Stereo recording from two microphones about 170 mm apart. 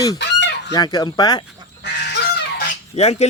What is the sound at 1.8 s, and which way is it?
Goose, 80° left.